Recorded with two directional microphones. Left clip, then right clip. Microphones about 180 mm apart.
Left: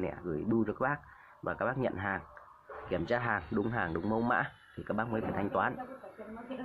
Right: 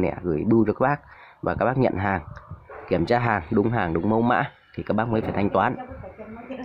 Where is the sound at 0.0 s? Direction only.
55° right (ahead or behind).